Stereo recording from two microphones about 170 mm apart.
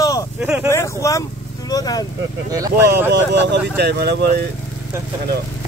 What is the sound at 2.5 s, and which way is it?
Speech, 20° right (ahead or behind).